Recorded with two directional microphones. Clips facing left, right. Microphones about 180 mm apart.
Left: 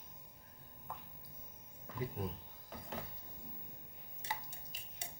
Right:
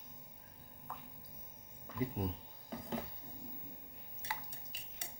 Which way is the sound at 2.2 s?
15° right (ahead or behind).